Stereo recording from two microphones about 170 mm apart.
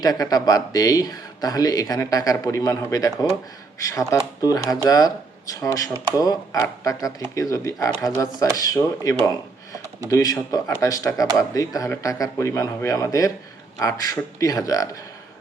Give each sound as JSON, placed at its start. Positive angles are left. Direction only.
{"t": 0.0, "sound": "speech", "side_deg": 20}